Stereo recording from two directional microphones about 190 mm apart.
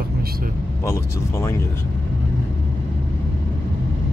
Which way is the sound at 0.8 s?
15° left (ahead or behind).